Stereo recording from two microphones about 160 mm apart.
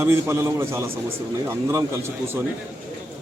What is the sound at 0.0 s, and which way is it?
A man's voice, 15° right (ahead or behind).